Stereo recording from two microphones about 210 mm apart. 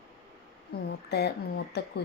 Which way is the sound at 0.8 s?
50° left (ahead or behind).